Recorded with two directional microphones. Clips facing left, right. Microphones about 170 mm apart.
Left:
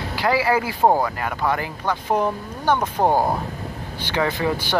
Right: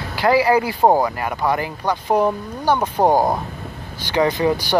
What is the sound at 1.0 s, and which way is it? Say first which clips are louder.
Speech: right 2 dB; 15° right (ahead or behind).